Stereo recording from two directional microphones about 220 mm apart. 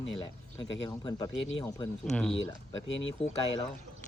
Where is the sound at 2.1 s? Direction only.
5° left (ahead or behind).